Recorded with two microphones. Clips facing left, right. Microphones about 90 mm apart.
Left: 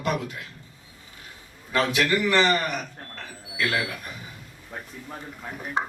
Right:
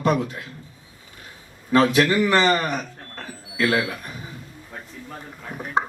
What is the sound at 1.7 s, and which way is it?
Speech, 40° right (ahead or behind).